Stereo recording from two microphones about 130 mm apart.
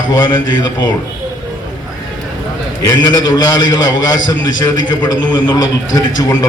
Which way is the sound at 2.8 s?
30° left (ahead or behind).